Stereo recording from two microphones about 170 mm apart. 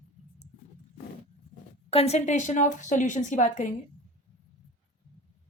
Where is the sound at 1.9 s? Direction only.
40° left (ahead or behind).